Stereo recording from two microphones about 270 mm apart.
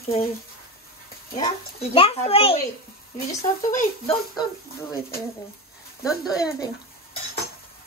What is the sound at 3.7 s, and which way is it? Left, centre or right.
Speech, left.